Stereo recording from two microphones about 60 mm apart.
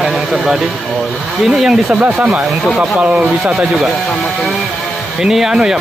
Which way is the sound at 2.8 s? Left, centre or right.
Right.